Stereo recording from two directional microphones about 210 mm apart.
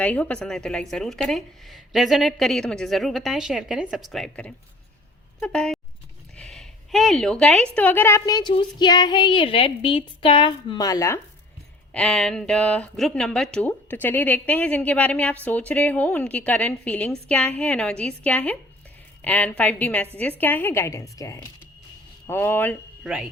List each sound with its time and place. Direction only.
0.0 s a woman's voice: 5° left (ahead or behind)
11.9 s a woman's voice: 5° left (ahead or behind)
23.0 s speech: 5° right (ahead or behind)